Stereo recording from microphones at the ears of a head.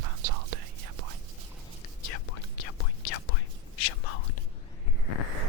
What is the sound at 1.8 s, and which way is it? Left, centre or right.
Whispering, left.